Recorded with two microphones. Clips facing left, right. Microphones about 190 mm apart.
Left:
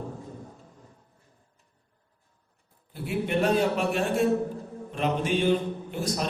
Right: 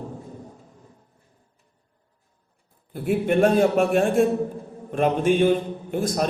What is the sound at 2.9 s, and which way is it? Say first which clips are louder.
A man's voice: right 7 dB; 50° right (ahead or behind).